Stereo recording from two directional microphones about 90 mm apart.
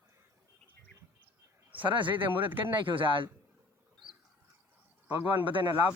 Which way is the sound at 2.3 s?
20° right (ahead or behind).